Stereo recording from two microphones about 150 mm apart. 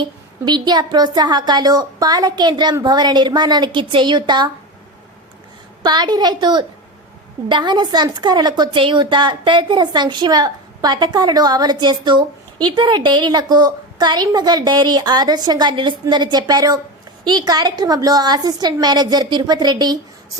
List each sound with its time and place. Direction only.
0.0 s a woman's voice: 30° right (ahead or behind)
5.8 s a woman's voice: 30° right (ahead or behind)